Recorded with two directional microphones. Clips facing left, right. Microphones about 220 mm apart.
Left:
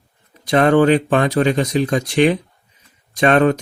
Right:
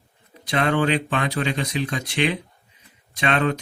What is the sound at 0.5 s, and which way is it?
Speech, 45° left (ahead or behind).